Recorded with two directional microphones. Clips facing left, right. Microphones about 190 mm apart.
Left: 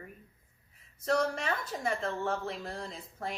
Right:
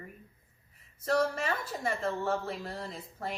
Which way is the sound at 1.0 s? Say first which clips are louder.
Right 1 dB; 5° right (ahead or behind).